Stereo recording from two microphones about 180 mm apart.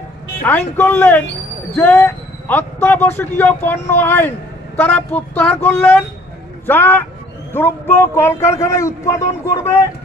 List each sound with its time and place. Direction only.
0.4 s a man's voice: 10° left (ahead or behind)